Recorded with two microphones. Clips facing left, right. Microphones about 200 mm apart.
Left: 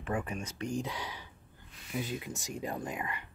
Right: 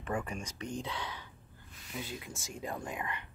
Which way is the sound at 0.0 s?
5° left (ahead or behind).